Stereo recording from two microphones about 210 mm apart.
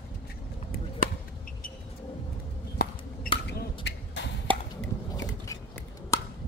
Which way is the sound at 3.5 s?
55° left (ahead or behind).